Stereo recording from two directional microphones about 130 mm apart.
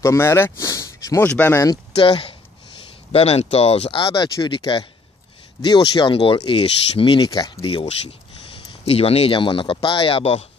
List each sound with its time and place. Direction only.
0.0 s speech: 20° left (ahead or behind)
2.0 s speech: 45° left (ahead or behind)
8.8 s speech: 50° left (ahead or behind)